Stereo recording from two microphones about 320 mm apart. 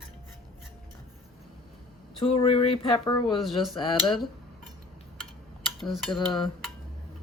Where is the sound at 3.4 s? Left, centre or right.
Centre.